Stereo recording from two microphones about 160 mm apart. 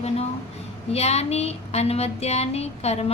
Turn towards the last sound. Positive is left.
turn(degrees=40)  # may be behind; listen again after turning